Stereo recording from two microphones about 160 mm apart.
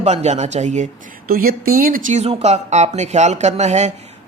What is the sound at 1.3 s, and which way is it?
Speech, 70° right (ahead or behind).